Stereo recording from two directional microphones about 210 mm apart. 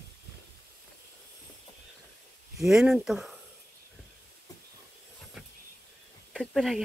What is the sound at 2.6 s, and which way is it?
Speech, centre (ahead or behind).